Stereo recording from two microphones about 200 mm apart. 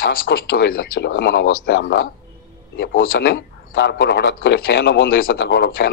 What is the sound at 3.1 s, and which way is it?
A man's voice, 55° left (ahead or behind).